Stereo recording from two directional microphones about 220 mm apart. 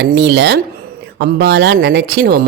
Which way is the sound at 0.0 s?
50° right (ahead or behind).